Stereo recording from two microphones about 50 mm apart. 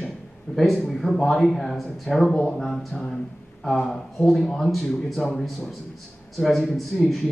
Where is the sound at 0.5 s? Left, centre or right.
Centre.